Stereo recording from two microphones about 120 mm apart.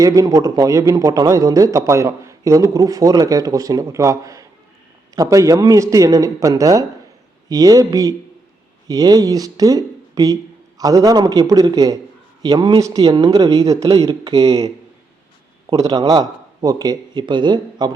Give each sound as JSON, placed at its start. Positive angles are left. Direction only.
{"t": 0.0, "sound": "a man's voice", "side_deg": -30}
{"t": 15.7, "sound": "speech", "side_deg": -30}